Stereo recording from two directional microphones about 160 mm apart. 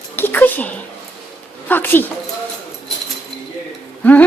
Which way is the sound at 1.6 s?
10° left (ahead or behind).